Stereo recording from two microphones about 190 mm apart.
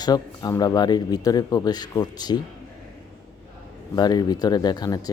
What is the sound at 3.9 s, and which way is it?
Speech, 20° left (ahead or behind).